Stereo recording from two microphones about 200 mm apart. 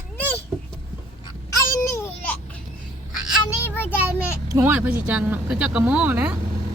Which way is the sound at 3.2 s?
5° right (ahead or behind).